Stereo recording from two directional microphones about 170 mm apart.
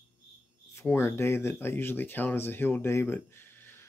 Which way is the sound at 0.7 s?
15° left (ahead or behind).